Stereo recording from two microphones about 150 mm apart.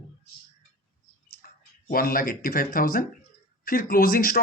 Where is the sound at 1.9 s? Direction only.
75° left (ahead or behind).